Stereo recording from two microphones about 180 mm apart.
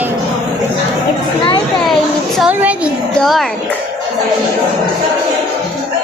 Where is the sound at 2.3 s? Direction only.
5° right (ahead or behind).